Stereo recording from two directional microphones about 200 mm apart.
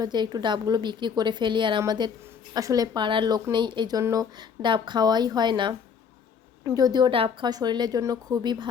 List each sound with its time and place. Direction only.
0.0 s a woman's voice: 20° right (ahead or behind)